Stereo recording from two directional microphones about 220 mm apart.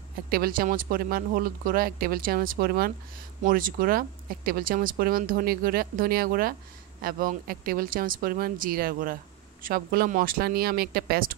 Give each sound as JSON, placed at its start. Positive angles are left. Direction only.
{"t": 0.3, "sound": "speech", "side_deg": -40}